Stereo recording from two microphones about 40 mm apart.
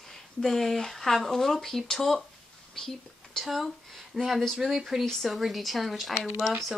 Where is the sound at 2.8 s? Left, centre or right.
Centre.